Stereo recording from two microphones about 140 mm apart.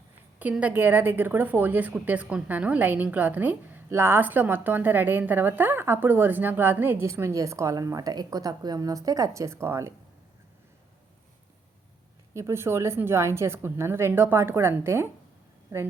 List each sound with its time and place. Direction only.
0.3 s a woman's voice: 10° right (ahead or behind)
12.3 s a woman's voice: 20° right (ahead or behind)